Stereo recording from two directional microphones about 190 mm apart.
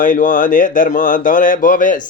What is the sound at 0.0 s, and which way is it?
Speech, 45° left (ahead or behind).